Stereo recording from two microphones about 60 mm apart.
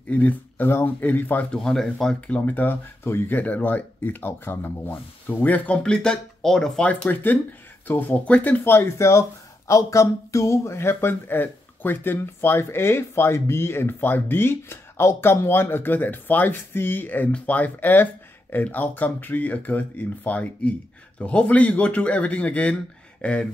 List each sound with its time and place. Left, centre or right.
0.1 s speech: left
0.7 s speech: left
1.6 s speech: centre
2.2 s speech: left
5.8 s speech: centre
6.8 s speech: left
8.8 s speech: left
9.7 s speech: left; by 23.4 s centre